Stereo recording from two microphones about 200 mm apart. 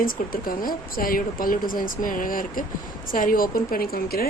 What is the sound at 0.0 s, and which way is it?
Speech, 45° left (ahead or behind).